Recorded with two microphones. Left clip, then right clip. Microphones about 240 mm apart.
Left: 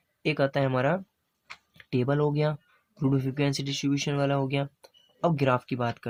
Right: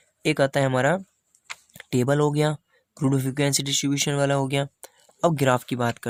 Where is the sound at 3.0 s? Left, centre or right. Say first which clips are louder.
Right 4 dB; right.